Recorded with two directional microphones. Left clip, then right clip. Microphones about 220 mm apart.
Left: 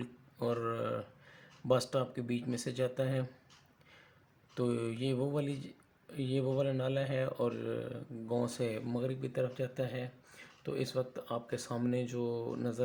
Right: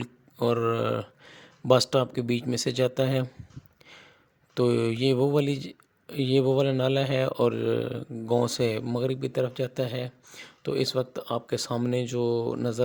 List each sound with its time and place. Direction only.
0.0 s speech: 45° right (ahead or behind)
3.8 s a sound: 45° right (ahead or behind)
4.5 s speech: 45° right (ahead or behind)